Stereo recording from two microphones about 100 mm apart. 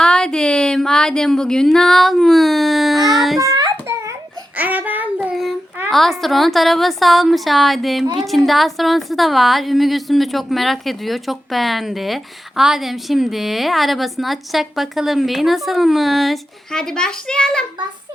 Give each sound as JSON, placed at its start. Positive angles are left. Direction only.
{"t": 0.0, "sound": "speech", "side_deg": 5}
{"t": 3.4, "sound": "child singing", "side_deg": -35}
{"t": 4.5, "sound": "child singing", "side_deg": -15}
{"t": 5.9, "sound": "a woman's voice", "side_deg": 0}